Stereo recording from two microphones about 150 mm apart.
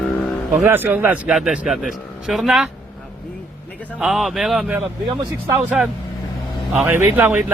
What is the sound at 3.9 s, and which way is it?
A man's voice, centre (ahead or behind).